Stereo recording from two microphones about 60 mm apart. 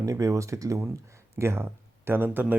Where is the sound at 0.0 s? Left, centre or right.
Right.